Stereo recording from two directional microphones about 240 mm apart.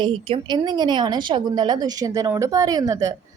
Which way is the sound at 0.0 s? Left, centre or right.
Right.